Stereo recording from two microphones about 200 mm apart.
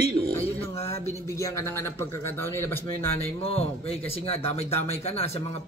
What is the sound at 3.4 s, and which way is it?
Speech, 30° left (ahead or behind).